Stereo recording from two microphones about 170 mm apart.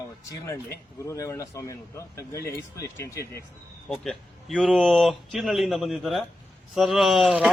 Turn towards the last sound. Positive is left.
turn(degrees=-5)  # may be behind; listen again after turning